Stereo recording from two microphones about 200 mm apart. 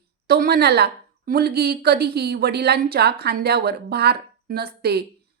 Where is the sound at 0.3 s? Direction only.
50° right (ahead or behind).